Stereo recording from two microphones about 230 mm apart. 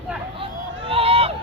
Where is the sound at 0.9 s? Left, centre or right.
Right.